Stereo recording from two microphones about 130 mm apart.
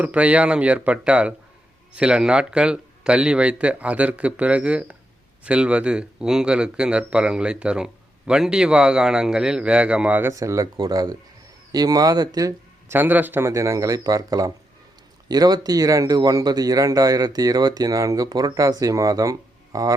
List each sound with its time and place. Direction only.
0.0 s speech: 10° right (ahead or behind)
10.3 s speech: 25° right (ahead or behind)
13.0 s speech: 15° right (ahead or behind)